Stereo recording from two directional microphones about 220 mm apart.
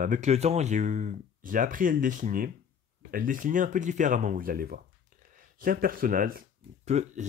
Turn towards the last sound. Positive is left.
turn(degrees=-30)  # may be behind; listen again after turning